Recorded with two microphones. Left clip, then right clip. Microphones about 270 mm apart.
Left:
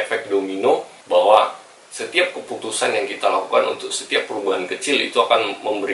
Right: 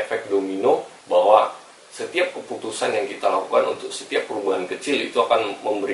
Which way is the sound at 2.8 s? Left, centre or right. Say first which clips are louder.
Left 2 dB; centre.